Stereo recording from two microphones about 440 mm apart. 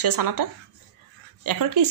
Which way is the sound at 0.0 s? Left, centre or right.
Right.